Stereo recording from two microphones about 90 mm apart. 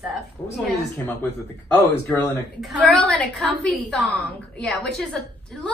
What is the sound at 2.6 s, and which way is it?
A woman's voice, 5° left (ahead or behind).